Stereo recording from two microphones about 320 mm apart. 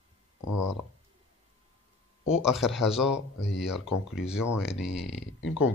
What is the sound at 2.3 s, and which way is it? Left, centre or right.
Speech, centre.